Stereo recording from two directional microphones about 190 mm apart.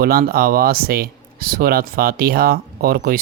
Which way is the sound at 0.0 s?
50° right (ahead or behind).